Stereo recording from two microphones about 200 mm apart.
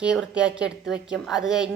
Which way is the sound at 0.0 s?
5° right (ahead or behind).